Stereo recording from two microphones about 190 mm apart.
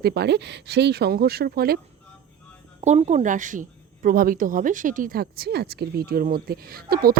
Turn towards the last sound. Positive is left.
turn(degrees=-50)  # may be behind; listen again after turning